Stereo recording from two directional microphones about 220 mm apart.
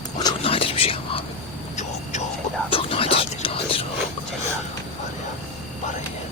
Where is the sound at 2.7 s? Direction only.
25° left (ahead or behind).